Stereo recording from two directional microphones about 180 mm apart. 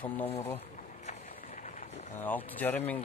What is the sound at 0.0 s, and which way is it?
Speech, 30° left (ahead or behind).